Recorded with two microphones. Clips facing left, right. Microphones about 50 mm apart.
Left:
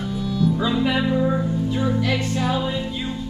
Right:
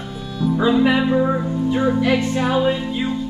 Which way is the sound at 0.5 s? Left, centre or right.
Right.